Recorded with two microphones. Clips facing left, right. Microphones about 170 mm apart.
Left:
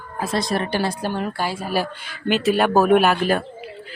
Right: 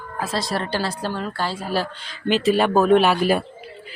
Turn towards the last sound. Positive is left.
turn(degrees=5)  # may be behind; listen again after turning